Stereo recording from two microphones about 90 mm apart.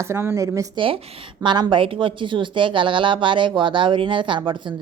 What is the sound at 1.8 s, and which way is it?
A woman's voice, 70° right (ahead or behind).